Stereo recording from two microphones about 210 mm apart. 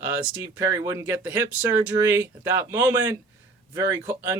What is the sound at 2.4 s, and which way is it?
Speech, 10° right (ahead or behind).